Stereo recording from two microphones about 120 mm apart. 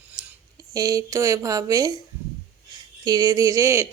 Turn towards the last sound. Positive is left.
turn(degrees=-25)  # may be behind; listen again after turning